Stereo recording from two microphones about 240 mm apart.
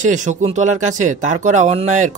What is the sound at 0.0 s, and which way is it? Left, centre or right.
Speech, right.